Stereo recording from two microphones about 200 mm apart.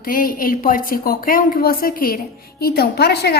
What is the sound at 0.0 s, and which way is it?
A woman's voice, 45° left (ahead or behind).